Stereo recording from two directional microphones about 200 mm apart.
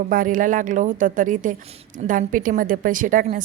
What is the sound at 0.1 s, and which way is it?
A woman's voice, 45° right (ahead or behind).